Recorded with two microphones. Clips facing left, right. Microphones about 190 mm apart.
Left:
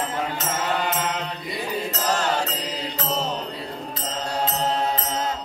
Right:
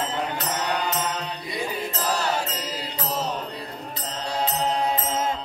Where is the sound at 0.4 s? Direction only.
50° left (ahead or behind).